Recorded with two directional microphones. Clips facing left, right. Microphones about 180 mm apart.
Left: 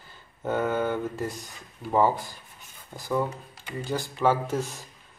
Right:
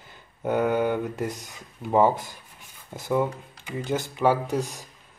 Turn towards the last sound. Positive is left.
turn(degrees=-15)  # may be behind; listen again after turning